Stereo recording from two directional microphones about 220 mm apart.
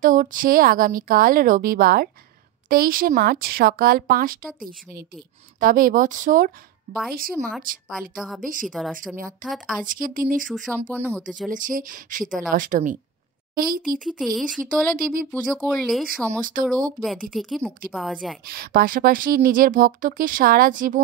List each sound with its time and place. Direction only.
0.0 s a woman's voice: 40° right (ahead or behind)
8.6 s speech: centre (ahead or behind)
9.8 s a woman's voice: 40° right (ahead or behind)
10.9 s speech: 10° right (ahead or behind)
11.5 s a woman's voice: 35° right (ahead or behind)
14.0 s speech: centre (ahead or behind)
14.6 s a woman's voice: 40° right (ahead or behind)
15.4 s speech: 5° left (ahead or behind)
16.3 s a woman's voice: 40° right (ahead or behind)
17.3 s speech: centre (ahead or behind)
18.4 s a woman's voice: 45° right (ahead or behind)